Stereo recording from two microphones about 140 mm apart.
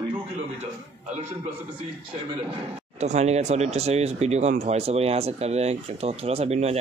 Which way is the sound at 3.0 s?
50° right (ahead or behind).